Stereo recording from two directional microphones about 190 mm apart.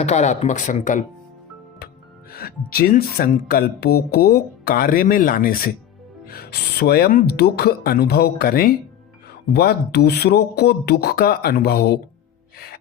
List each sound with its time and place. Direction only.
0.0 s speech: 35° left (ahead or behind)
2.3 s speech: 55° left (ahead or behind)